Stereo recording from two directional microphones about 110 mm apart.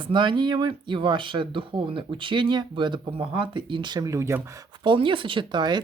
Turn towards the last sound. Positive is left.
turn(degrees=-45)  # may be behind; listen again after turning